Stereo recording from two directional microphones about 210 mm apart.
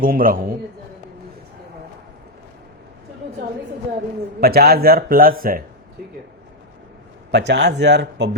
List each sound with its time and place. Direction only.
0.0 s speech: 40° right (ahead or behind)
4.4 s speech: 45° right (ahead or behind)
7.3 s speech: 55° right (ahead or behind)